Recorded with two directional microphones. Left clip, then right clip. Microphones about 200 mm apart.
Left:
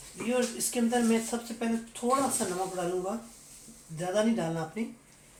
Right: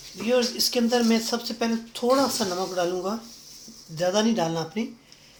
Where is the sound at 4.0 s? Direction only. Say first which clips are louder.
Right 6 dB; 45° right (ahead or behind).